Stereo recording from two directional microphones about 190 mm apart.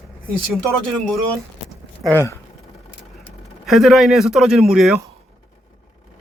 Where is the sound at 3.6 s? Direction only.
Centre (ahead or behind).